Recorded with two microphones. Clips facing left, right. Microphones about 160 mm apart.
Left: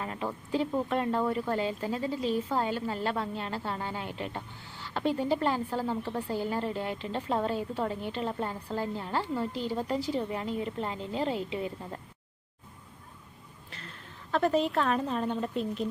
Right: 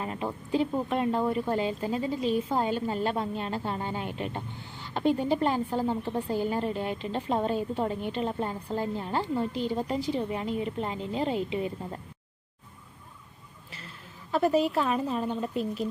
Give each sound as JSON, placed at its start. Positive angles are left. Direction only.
{"t": 0.0, "sound": "speech", "side_deg": -20}
{"t": 13.7, "sound": "a woman's voice", "side_deg": -5}